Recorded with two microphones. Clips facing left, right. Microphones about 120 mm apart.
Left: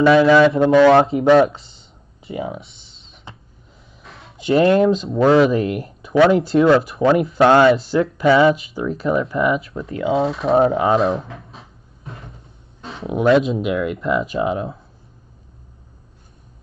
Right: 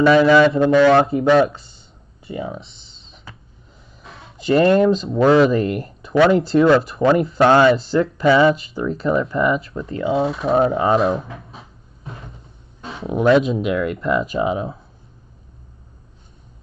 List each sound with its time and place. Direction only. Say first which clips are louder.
0.0 s speech: even; centre (ahead or behind)
0.7 s speech: left 2 dB; 25° left (ahead or behind)
2.5 s a sound: even; centre (ahead or behind)
4.1 s speech: even; centre (ahead or behind)
12.9 s speech: even; centre (ahead or behind)